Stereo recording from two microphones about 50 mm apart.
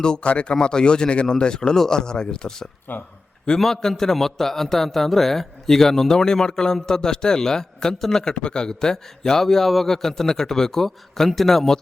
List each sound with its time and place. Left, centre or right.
0.0 s a man's voice: centre
2.9 s speech: left
3.6 s a man's voice: centre